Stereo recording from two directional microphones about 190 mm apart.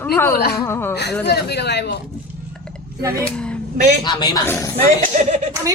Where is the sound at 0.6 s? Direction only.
10° left (ahead or behind).